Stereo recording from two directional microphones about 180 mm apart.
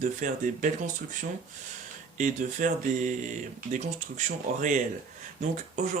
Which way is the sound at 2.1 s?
45° right (ahead or behind).